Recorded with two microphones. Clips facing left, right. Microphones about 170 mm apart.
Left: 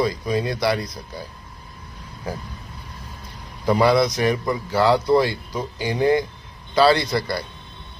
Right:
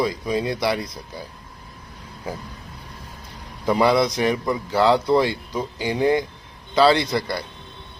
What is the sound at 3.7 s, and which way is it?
Speech, 20° right (ahead or behind).